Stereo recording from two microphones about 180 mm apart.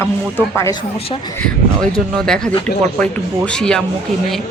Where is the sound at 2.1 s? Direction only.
5° left (ahead or behind).